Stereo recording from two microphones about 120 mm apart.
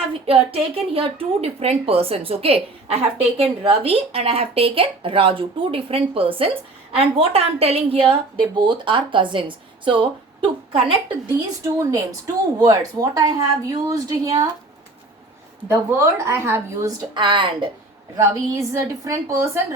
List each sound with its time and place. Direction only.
0.1 s a woman's voice: 55° right (ahead or behind)
8.6 s a woman's voice: 40° right (ahead or behind)
11.8 s a woman's voice: 25° right (ahead or behind)
15.7 s a woman's voice: 20° right (ahead or behind)
17.2 s a woman's voice: 45° right (ahead or behind)
18.2 s a woman's voice: 25° right (ahead or behind)